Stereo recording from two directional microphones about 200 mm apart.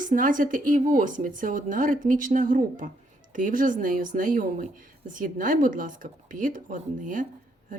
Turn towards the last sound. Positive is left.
turn(degrees=-40)  # may be behind; listen again after turning